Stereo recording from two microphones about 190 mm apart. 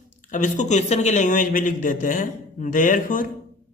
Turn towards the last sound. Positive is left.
turn(degrees=45)  # may be behind; listen again after turning